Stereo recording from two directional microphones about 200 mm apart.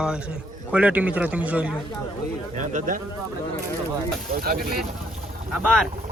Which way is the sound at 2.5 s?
40° right (ahead or behind).